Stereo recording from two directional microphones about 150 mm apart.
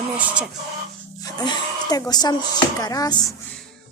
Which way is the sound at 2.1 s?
25° left (ahead or behind).